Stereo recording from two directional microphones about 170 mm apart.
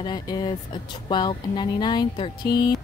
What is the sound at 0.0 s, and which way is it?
Speech, 25° left (ahead or behind).